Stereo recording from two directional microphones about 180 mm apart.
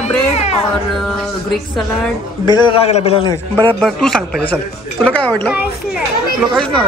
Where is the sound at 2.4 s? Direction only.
25° left (ahead or behind).